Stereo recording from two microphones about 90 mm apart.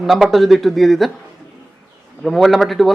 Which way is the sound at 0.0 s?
Centre (ahead or behind).